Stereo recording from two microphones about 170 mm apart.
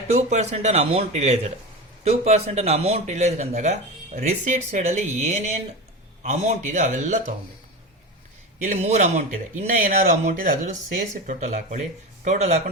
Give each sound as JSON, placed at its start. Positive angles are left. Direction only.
{"t": 0.1, "sound": "speech", "side_deg": -40}
{"t": 8.6, "sound": "speech", "side_deg": -45}